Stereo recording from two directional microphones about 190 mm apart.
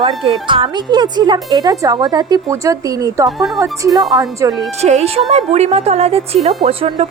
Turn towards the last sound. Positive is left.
turn(degrees=-30)  # may be behind; listen again after turning